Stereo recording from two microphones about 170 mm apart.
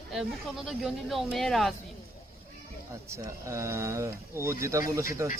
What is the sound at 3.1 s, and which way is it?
Speech, 15° right (ahead or behind).